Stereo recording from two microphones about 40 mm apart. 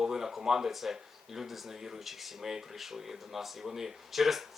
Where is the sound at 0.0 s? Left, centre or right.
Centre.